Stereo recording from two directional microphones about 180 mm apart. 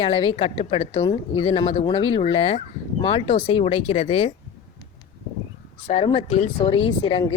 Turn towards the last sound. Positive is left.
turn(degrees=25)  # may be behind; listen again after turning